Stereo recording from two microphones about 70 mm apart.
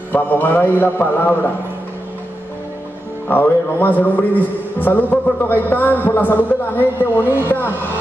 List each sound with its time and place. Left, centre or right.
0.1 s a man's voice: left
3.3 s a man's voice: left